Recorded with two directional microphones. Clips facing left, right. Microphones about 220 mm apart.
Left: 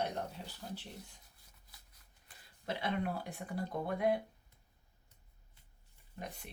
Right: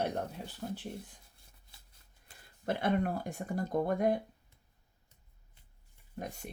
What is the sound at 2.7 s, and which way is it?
Speech, 50° right (ahead or behind).